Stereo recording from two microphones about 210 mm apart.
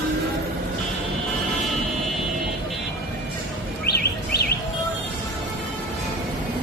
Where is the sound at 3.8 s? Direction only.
50° left (ahead or behind).